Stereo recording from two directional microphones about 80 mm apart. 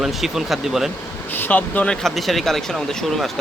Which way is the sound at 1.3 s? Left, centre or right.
Left.